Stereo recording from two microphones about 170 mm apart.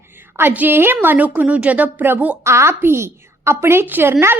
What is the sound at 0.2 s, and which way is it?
A woman's voice, 10° right (ahead or behind).